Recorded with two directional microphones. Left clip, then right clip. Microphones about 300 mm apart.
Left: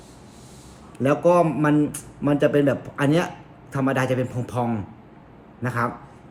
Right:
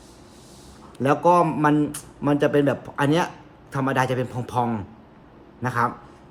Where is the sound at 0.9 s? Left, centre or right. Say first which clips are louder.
Even; centre.